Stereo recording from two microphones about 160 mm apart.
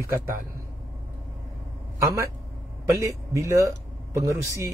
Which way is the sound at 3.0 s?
15° right (ahead or behind).